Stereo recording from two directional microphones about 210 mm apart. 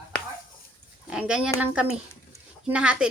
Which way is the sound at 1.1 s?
5° right (ahead or behind).